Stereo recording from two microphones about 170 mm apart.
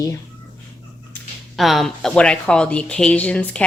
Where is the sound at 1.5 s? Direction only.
Centre (ahead or behind).